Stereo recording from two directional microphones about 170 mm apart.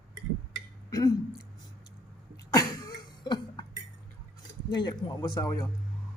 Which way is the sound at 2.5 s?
20° left (ahead or behind).